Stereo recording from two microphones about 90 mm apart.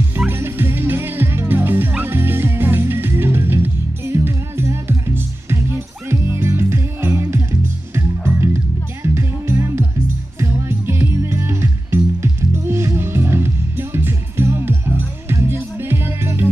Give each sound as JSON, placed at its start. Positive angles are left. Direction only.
{"t": 0.3, "sound": "music", "side_deg": -25}